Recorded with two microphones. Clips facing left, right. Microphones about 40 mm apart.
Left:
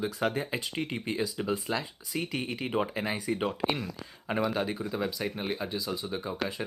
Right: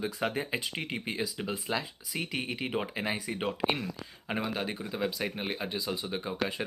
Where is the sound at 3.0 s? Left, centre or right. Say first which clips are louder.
Left 2 dB; right.